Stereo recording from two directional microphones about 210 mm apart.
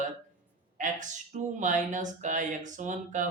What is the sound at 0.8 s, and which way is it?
Speech, 35° right (ahead or behind).